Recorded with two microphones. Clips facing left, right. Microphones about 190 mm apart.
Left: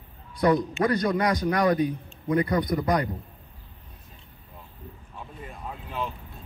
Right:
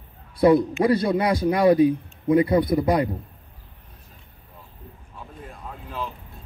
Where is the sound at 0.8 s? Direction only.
25° right (ahead or behind).